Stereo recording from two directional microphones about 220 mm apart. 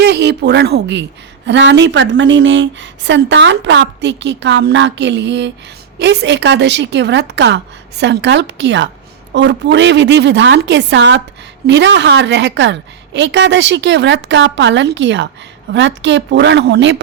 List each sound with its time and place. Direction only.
0.0 s a woman's voice: 50° right (ahead or behind)